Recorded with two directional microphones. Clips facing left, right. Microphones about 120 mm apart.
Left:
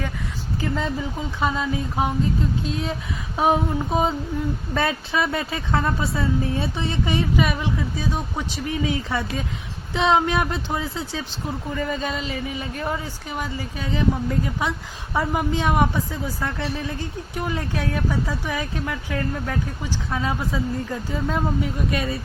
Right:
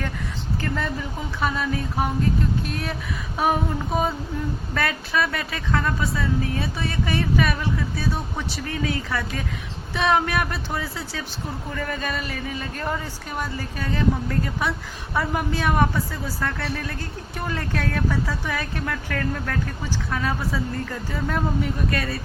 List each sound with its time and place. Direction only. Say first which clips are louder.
1.4 s a woman's voice: left 1 dB; 20° left (ahead or behind)